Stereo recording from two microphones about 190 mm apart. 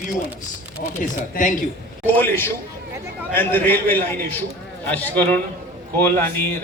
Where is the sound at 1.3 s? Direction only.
45° left (ahead or behind).